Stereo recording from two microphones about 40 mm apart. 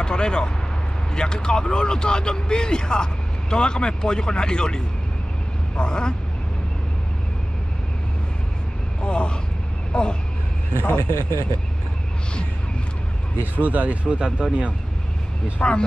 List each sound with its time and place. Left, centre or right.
0.0 s vehicle: left
1.1 s speech: left
9.0 s speech: left
11.1 s speech: right
13.4 s speech: right
15.6 s speech: left